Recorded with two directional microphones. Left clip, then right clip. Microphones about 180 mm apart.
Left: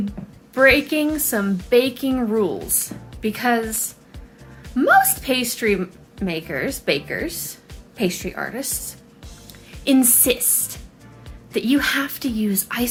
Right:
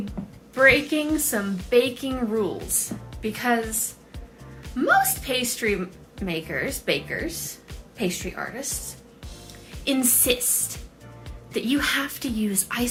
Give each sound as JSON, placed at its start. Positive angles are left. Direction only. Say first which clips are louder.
{"t": 0.5, "sound": "speech", "louder": "left 3 dB", "side_deg": 20}
{"t": 9.8, "sound": "speech", "louder": "left 5 dB", "side_deg": 25}